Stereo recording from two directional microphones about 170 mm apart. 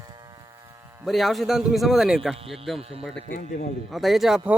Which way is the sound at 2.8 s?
35° right (ahead or behind).